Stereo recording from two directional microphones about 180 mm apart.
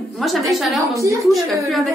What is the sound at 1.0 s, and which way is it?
Speech, 15° right (ahead or behind).